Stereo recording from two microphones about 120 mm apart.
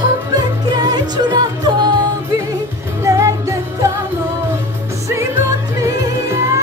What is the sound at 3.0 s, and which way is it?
Music, 25° right (ahead or behind).